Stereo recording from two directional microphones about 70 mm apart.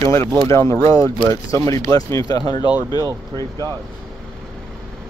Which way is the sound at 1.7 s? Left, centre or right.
Left.